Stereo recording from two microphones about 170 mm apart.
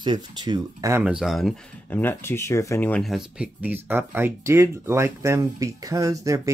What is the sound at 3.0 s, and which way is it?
Speech, 5° right (ahead or behind).